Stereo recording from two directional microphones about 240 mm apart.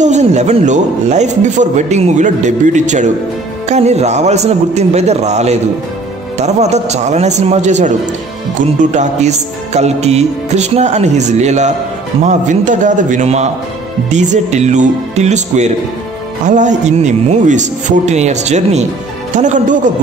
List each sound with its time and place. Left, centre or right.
0.0 s a man's voice: right